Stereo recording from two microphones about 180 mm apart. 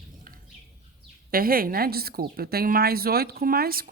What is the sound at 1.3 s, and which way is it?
A woman's voice, 55° right (ahead or behind).